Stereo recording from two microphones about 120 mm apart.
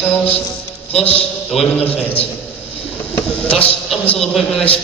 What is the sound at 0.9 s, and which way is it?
A man's voice, 55° left (ahead or behind).